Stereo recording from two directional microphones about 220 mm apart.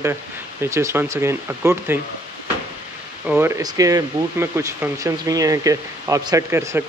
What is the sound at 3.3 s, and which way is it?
Speech, 10° right (ahead or behind).